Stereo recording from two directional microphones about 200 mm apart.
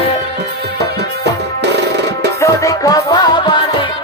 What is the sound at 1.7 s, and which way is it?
Music, 55° right (ahead or behind).